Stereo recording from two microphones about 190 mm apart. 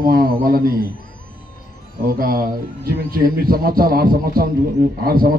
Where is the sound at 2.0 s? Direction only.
50° right (ahead or behind).